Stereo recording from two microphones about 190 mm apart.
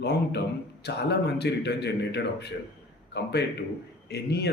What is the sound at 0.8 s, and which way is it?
Speech, 60° left (ahead or behind).